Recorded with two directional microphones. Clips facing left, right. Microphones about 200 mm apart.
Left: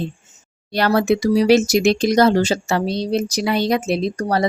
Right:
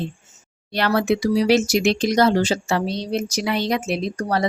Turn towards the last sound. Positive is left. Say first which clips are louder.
# left 3 dB
turn(degrees=35)  # may be behind; listen again after turning